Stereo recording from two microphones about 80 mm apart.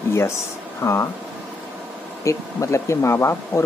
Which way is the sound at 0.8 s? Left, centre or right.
Left.